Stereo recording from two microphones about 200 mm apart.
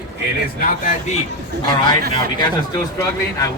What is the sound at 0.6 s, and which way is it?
Speech, 45° left (ahead or behind).